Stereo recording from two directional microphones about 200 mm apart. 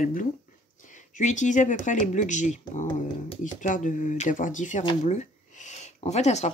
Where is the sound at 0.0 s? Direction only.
40° left (ahead or behind).